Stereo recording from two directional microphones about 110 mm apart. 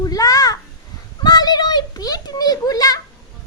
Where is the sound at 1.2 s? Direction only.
35° left (ahead or behind).